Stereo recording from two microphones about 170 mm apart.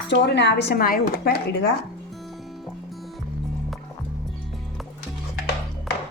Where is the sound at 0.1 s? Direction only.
90° left; by 1.7 s 70° left (ahead or behind).